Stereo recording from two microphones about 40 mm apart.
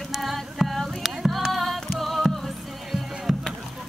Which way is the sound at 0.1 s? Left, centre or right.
Centre.